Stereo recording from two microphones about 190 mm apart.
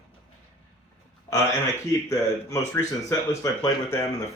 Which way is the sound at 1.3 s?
15° left (ahead or behind).